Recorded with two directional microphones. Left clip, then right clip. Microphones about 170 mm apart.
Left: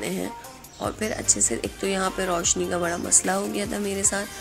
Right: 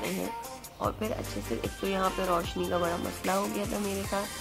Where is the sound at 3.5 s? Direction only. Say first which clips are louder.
Left 5 dB; 20° left (ahead or behind).